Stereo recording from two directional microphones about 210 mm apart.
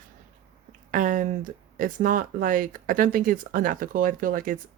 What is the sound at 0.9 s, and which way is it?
Speech, 40° right (ahead or behind).